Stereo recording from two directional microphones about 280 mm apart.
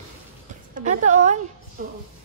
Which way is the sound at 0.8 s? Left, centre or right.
Right.